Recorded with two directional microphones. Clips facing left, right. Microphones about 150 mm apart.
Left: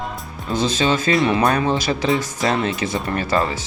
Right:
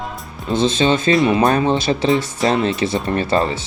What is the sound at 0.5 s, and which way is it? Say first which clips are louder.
Speech: right 3 dB; 25° right (ahead or behind).